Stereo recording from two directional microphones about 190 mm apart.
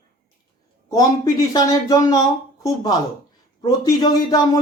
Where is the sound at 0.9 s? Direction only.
20° left (ahead or behind).